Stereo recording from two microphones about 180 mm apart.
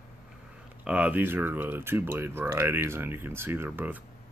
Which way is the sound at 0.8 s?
5° right (ahead or behind).